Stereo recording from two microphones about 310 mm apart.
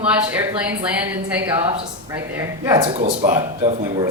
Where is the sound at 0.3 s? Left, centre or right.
Centre.